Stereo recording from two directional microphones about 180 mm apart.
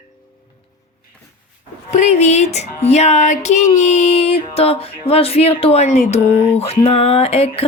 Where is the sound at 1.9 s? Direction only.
40° left (ahead or behind).